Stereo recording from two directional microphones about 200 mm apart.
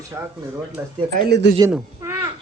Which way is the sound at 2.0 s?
15° right (ahead or behind).